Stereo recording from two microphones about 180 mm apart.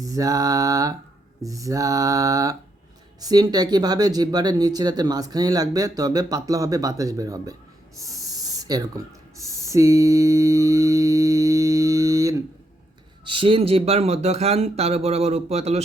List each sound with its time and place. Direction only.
0.0 s speech: 20° right (ahead or behind)
8.0 s spray: 20° right (ahead or behind)
9.6 s a sound: 15° right (ahead or behind)
13.2 s speech: 30° right (ahead or behind)